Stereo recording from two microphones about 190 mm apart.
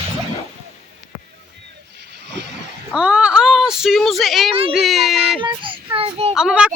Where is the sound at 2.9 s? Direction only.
5° right (ahead or behind).